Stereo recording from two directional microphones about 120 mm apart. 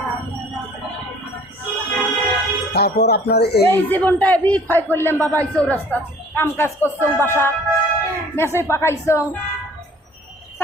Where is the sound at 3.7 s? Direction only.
15° left (ahead or behind).